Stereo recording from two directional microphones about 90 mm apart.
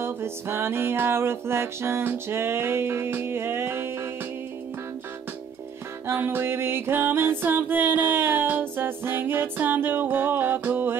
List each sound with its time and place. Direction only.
0.0 s music: 30° right (ahead or behind)
6.0 s music: 25° right (ahead or behind)